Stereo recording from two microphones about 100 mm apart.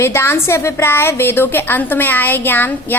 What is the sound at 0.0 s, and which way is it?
A woman's voice, 25° left (ahead or behind).